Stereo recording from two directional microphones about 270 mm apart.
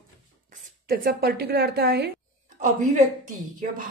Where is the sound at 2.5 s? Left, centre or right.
Right.